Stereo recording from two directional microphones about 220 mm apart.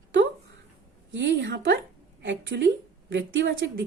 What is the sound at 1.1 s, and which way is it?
A woman's voice, 55° right (ahead or behind).